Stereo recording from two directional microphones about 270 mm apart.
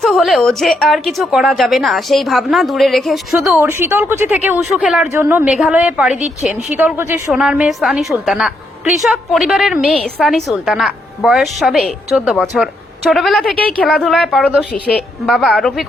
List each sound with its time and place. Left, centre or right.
0.0 s a woman's voice: centre